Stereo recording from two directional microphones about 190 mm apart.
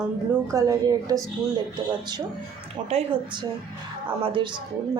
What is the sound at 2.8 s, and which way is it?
Speech, 30° right (ahead or behind).